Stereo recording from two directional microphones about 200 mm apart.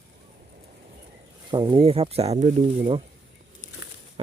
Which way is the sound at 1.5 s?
25° right (ahead or behind).